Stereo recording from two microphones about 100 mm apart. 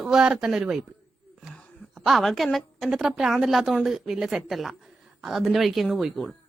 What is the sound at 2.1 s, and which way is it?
Speech, centre (ahead or behind).